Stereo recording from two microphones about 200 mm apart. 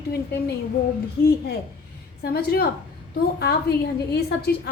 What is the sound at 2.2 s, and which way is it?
A woman's voice, 50° left (ahead or behind).